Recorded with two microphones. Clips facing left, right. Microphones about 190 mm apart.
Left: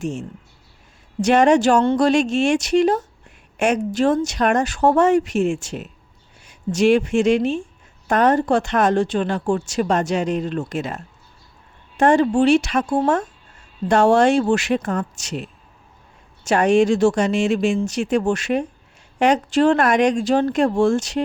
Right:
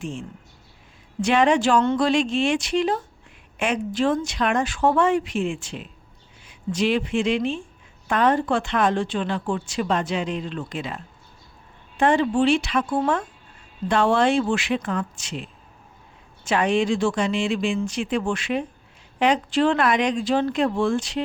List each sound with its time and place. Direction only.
0.0 s speech: 45° left (ahead or behind)